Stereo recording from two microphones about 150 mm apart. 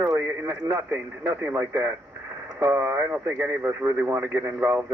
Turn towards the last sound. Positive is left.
turn(degrees=-10)  # may be behind; listen again after turning